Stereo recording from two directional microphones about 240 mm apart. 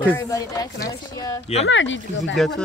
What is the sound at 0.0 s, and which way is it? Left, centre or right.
Speech, centre.